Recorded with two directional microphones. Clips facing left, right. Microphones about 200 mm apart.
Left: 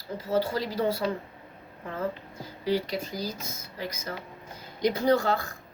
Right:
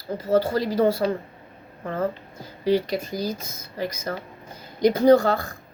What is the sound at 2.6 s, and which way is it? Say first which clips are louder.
Speech: right 6 dB; 20° right (ahead or behind).